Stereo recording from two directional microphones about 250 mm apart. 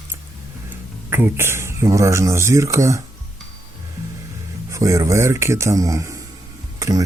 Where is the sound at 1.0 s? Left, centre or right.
Centre.